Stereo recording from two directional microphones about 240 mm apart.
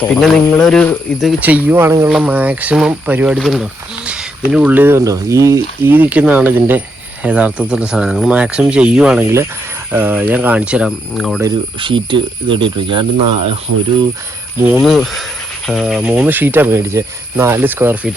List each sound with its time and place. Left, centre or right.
0.0 s speech: centre
11.4 s speech: right
14.7 s speech: centre